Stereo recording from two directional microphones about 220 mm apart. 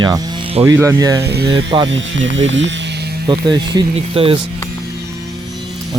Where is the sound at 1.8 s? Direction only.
60° right (ahead or behind).